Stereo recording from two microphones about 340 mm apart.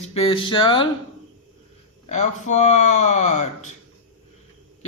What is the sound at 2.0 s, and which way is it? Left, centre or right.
Speech, centre.